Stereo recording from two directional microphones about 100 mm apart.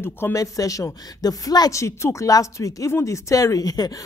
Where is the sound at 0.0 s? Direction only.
25° left (ahead or behind).